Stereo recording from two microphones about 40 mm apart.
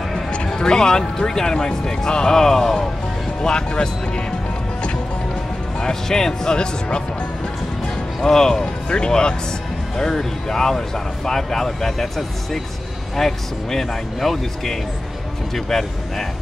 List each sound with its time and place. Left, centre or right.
0.6 s speech: centre
5.8 s speech: centre
8.2 s speech: centre
8.8 s speech: left